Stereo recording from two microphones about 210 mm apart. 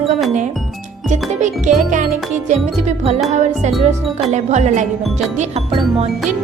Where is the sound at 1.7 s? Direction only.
35° right (ahead or behind).